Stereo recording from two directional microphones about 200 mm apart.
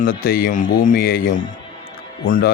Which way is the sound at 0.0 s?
45° left (ahead or behind).